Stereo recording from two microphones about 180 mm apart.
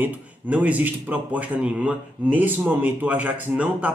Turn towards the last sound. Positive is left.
turn(degrees=-5)  # may be behind; listen again after turning